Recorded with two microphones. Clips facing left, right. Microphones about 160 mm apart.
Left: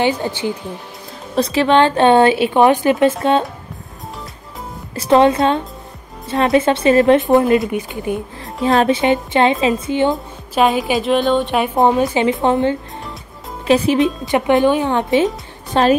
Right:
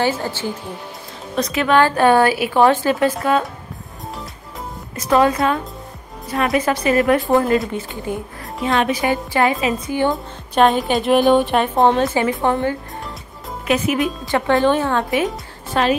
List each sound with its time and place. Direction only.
0.0 s speech: 15° left (ahead or behind)
1.3 s a woman's voice: 30° left (ahead or behind)
4.9 s a woman's voice: 30° left (ahead or behind)
8.6 s a woman's voice: 35° left (ahead or behind)
10.1 s music: 5° left (ahead or behind)
12.0 s a woman's voice: 20° left (ahead or behind)
13.7 s a woman's voice: 30° left (ahead or behind)